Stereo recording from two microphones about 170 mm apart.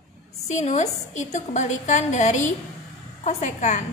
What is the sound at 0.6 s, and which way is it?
A woman's voice, 45° left (ahead or behind).